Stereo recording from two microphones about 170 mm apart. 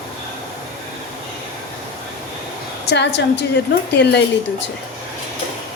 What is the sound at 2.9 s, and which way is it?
A woman's voice, 90° left.